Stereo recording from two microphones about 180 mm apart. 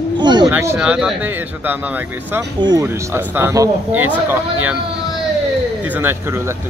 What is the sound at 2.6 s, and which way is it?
Speech, 20° right (ahead or behind).